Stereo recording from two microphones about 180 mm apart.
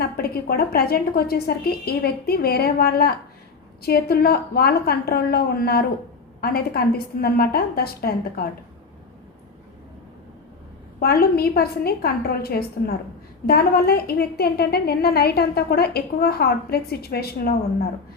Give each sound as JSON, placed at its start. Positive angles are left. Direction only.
{"t": 0.0, "sound": "a woman's voice", "side_deg": 55}
{"t": 11.0, "sound": "a woman's voice", "side_deg": 55}